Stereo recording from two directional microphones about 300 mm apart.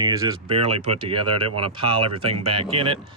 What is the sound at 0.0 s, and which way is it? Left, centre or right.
Speech, centre.